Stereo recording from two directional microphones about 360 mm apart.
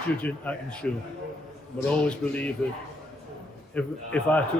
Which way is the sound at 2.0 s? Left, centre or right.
Centre.